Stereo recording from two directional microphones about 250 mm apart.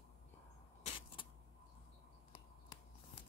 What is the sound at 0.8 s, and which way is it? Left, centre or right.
Vehicle, centre.